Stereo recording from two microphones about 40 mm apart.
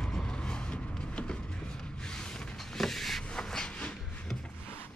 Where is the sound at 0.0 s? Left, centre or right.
Left.